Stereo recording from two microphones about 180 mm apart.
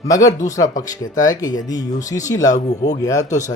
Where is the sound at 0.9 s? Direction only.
20° left (ahead or behind).